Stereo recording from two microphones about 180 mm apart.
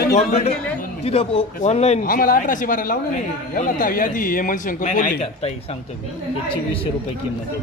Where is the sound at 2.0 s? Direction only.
50° left (ahead or behind).